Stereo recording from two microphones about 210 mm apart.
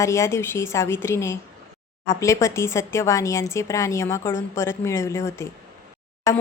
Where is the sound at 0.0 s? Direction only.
15° left (ahead or behind).